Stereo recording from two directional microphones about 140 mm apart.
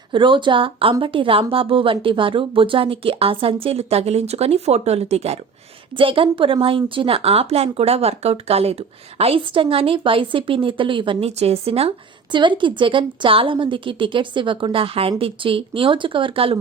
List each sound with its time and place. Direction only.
0.1 s speech: 35° right (ahead or behind)
11.3 s speech: 45° right (ahead or behind)